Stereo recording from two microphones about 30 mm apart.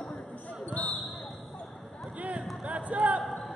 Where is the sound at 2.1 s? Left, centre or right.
Right.